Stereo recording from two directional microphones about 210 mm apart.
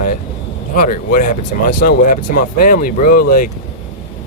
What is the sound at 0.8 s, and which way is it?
Speech, 40° left (ahead or behind).